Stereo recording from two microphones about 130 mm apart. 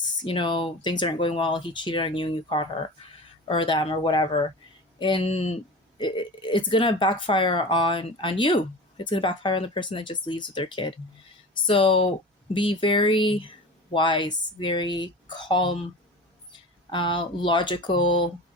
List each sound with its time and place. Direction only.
0.2 s speech: 40° left (ahead or behind)
5.3 s speech: 55° left (ahead or behind)
6.0 s speech: 35° left (ahead or behind)